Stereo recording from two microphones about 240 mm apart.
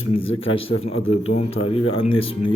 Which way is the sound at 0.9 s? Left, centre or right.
Left.